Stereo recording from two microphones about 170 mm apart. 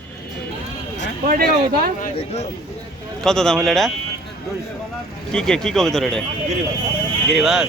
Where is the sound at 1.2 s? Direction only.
60° right (ahead or behind).